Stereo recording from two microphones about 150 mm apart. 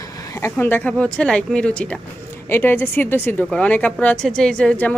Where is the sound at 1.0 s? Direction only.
5° left (ahead or behind).